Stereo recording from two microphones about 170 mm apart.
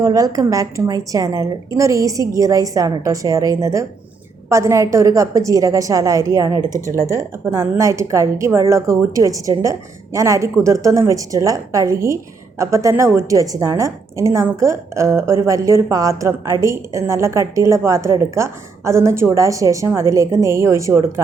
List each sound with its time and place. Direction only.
0.0 s a woman's voice: 20° right (ahead or behind)